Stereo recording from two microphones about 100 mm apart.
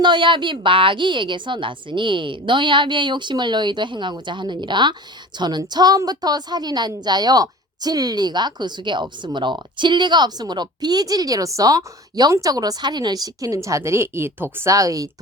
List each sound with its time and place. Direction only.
0.0 s a woman's voice: 55° right (ahead or behind); by 15.1 s 35° right (ahead or behind)